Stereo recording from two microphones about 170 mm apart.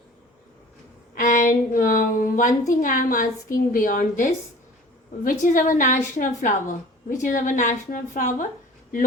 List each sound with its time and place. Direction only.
1.1 s a woman's voice: 50° left (ahead or behind)